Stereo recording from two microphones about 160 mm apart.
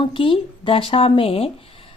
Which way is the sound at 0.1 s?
35° left (ahead or behind).